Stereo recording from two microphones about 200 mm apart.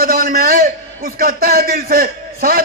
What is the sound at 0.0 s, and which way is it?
A man's voice, 45° right (ahead or behind).